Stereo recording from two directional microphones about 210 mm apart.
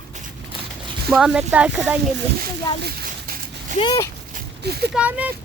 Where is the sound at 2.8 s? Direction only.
45° right (ahead or behind).